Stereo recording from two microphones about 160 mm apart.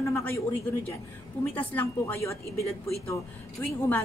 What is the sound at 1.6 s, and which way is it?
Speech, 10° left (ahead or behind).